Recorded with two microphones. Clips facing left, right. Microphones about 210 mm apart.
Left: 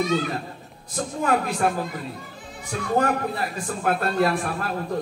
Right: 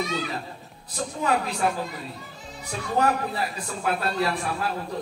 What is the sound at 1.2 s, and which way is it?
Speech, 50° left (ahead or behind).